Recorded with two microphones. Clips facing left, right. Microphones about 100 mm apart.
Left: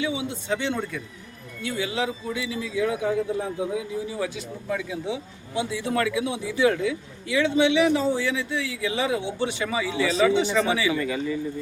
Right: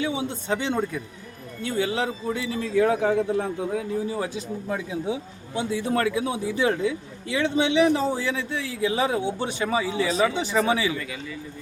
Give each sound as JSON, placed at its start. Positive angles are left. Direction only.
{"t": 0.0, "sound": "a man's voice", "side_deg": -40}
{"t": 4.1, "sound": "a man's voice", "side_deg": -35}
{"t": 10.9, "sound": "a man's voice", "side_deg": 30}